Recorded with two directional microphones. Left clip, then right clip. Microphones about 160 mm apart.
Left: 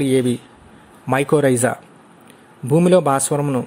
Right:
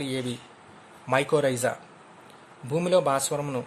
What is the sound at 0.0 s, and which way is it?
Speech, 40° left (ahead or behind).